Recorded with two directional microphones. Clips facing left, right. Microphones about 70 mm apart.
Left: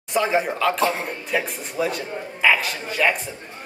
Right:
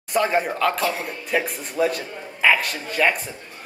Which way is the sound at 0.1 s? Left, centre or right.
Centre.